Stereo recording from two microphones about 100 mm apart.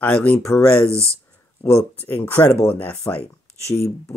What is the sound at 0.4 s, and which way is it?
Speech, 30° left (ahead or behind).